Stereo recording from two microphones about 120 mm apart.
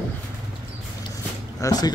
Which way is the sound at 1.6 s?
30° left (ahead or behind).